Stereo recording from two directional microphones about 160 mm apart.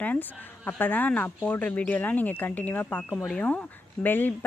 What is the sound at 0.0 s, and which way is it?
Speech, 10° left (ahead or behind).